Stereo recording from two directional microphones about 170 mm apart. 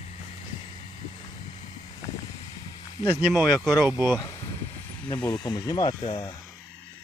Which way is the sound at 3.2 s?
Centre (ahead or behind).